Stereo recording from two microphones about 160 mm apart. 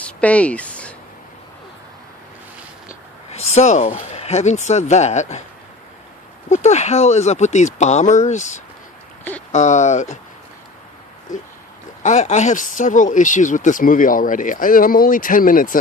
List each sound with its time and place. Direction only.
0.2 s speech: 10° left (ahead or behind)
3.2 s speech: 45° left (ahead or behind)
6.5 s speech: 45° left (ahead or behind)
12.0 s speech: 45° left (ahead or behind)